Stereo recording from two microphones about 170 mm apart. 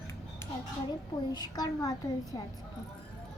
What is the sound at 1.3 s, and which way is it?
A woman's voice, 25° left (ahead or behind).